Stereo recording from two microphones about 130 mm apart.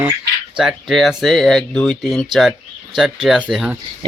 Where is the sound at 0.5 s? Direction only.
Centre (ahead or behind).